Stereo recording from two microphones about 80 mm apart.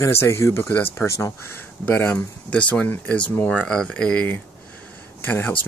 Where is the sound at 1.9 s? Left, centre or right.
Left.